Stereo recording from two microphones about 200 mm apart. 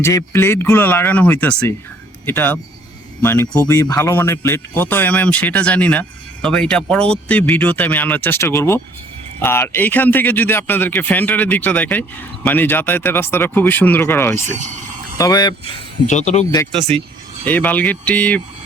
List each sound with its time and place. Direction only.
0.0 s a man's voice: 15° left (ahead or behind)
14.5 s speech: 40° right (ahead or behind)
15.2 s speech: 20° left (ahead or behind)
16.0 s speech: 35° left (ahead or behind)
16.7 s speech: 25° right (ahead or behind)
17.4 s a man's voice: 10° left (ahead or behind)